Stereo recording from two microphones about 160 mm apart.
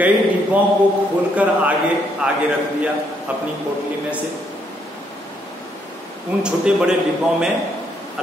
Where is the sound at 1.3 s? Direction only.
10° right (ahead or behind).